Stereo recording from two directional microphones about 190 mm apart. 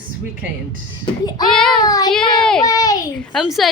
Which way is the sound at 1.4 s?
Centre (ahead or behind).